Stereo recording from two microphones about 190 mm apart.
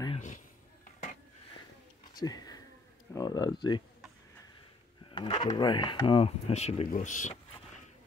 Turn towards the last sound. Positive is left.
turn(degrees=40)  # may be behind; listen again after turning